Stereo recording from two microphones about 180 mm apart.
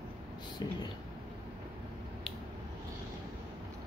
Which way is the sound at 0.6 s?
25° left (ahead or behind).